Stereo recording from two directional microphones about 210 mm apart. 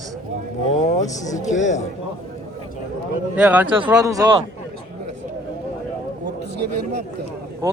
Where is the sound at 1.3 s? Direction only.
35° left (ahead or behind).